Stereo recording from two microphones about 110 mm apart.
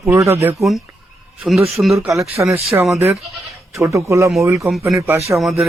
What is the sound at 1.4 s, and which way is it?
Speech, centre (ahead or behind).